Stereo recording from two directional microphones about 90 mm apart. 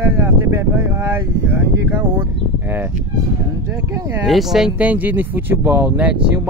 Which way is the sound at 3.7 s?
40° right (ahead or behind).